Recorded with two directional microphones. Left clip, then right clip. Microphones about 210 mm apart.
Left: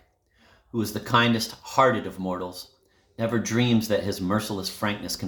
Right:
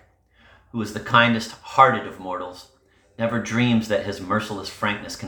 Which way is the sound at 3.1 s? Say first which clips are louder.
Right 2 dB; 60° left (ahead or behind).